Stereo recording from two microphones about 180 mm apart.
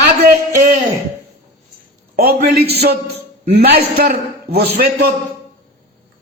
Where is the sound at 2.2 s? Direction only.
60° right (ahead or behind).